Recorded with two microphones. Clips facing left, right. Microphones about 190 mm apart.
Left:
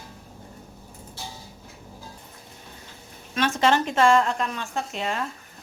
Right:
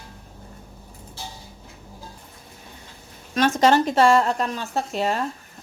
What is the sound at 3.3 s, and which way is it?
A woman's voice, 40° right (ahead or behind).